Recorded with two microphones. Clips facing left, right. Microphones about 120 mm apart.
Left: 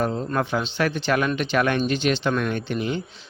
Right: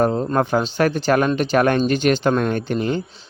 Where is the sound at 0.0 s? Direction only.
45° right (ahead or behind).